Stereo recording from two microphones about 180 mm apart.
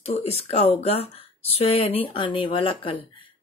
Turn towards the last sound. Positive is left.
turn(degrees=30)  # may be behind; listen again after turning